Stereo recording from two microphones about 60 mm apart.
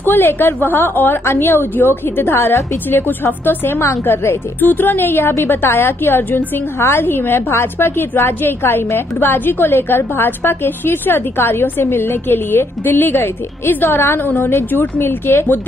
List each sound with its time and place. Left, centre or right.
0.0 s a woman's voice: left
4.6 s a woman's voice: left
13.8 s a woman's voice: left